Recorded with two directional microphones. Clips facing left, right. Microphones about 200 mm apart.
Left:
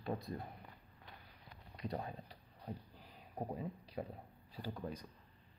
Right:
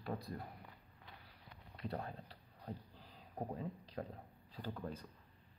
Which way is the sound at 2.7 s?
10° left (ahead or behind).